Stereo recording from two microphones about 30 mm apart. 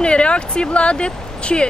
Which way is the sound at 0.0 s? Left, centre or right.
Left.